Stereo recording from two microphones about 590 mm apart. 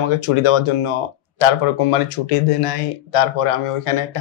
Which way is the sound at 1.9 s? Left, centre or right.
Left.